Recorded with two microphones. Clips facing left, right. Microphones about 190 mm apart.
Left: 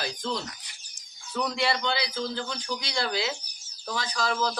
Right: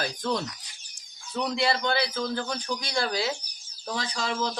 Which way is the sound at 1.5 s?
30° right (ahead or behind).